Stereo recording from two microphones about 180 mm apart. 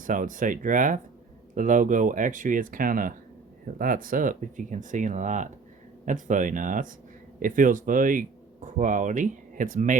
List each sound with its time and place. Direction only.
0.0 s speech: 45° right (ahead or behind)